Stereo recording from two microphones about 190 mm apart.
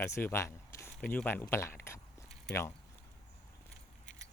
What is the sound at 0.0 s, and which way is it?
Speech, 15° left (ahead or behind).